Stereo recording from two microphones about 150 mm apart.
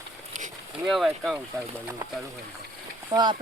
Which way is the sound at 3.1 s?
30° right (ahead or behind).